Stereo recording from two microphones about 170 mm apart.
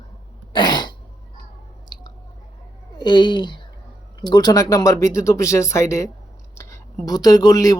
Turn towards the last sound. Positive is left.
turn(degrees=20)  # may be behind; listen again after turning